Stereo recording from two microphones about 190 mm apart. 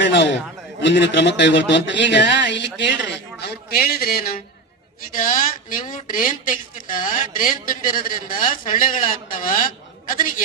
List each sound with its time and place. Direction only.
0.0 s a man's voice: 70° left (ahead or behind); by 10.4 s 45° left (ahead or behind)